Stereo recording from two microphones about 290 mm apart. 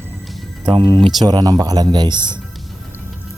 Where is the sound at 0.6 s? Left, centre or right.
Centre.